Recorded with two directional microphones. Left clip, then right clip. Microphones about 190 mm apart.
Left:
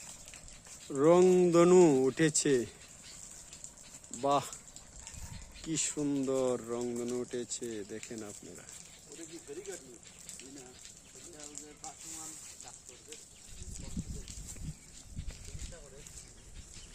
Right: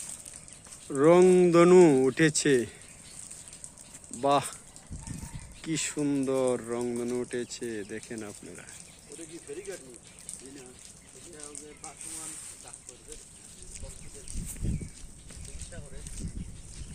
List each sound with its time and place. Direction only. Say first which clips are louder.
0.9 s speech: right 5 dB; 5° left (ahead or behind)
4.2 s speech: right 5 dB; 5° left (ahead or behind)
5.6 s speech: right 4 dB; 5° left (ahead or behind)
9.7 s speech: right 4 dB; 50° left (ahead or behind)